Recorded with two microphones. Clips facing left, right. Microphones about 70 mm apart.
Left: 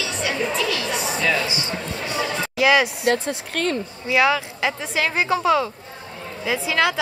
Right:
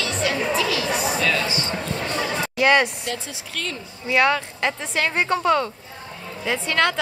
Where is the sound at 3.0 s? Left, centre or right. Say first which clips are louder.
Left 9 dB; left.